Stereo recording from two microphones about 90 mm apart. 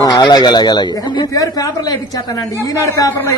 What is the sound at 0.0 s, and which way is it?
Speech, 50° left (ahead or behind).